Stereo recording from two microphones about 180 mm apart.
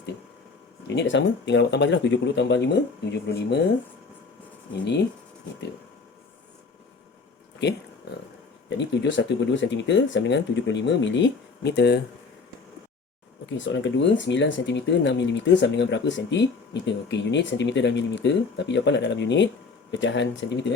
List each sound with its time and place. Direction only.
0.9 s speech: 80° left
8.8 s speech: 85° left; by 12.0 s 65° left (ahead or behind)
13.6 s speech: 90° left